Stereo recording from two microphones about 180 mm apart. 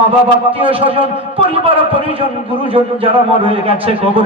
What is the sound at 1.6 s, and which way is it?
A man's voice, 30° right (ahead or behind).